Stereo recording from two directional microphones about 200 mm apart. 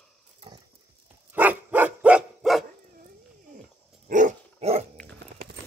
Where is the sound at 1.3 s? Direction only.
10° right (ahead or behind).